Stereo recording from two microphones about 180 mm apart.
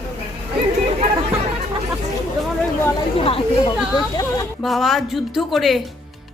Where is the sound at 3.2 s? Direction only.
30° left (ahead or behind).